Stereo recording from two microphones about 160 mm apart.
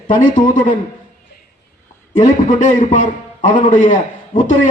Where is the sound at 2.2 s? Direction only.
50° left (ahead or behind).